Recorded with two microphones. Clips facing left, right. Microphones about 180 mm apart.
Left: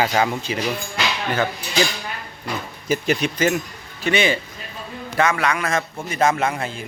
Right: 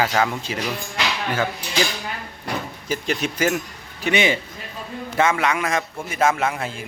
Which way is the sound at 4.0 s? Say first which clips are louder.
Left 1 dB; 15° right (ahead or behind).